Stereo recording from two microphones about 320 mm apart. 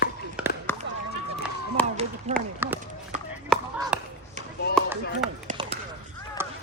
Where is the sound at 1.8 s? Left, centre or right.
Centre.